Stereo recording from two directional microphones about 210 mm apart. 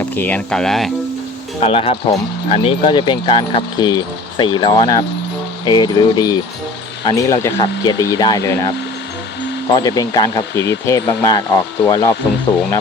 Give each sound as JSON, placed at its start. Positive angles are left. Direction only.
{"t": 0.2, "sound": "speech", "side_deg": 5}
{"t": 1.6, "sound": "speech", "side_deg": 30}
{"t": 9.7, "sound": "speech", "side_deg": 20}